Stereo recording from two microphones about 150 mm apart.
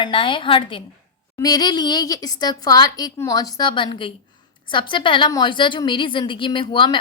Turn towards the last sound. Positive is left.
turn(degrees=30)  # may be behind; listen again after turning